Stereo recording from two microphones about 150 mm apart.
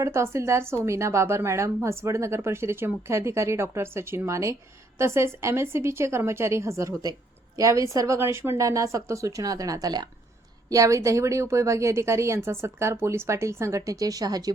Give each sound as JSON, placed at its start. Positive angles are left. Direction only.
{"t": 0.0, "sound": "a woman's voice", "side_deg": -20}